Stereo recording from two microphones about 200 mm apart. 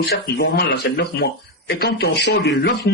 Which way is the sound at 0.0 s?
55° left (ahead or behind).